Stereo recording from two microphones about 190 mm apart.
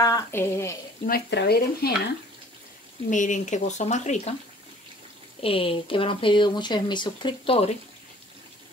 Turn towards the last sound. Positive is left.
turn(degrees=30)  # may be behind; listen again after turning